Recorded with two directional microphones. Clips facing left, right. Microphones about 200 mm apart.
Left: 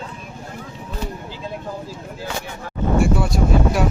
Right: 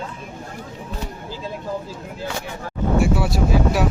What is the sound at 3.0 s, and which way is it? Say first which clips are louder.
Speech: left 1 dB; 5° right (ahead or behind).